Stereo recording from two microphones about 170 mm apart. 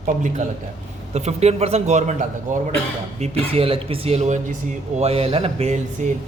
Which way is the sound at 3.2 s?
35° right (ahead or behind).